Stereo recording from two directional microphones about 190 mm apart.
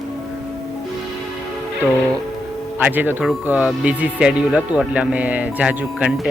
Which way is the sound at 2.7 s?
10° right (ahead or behind).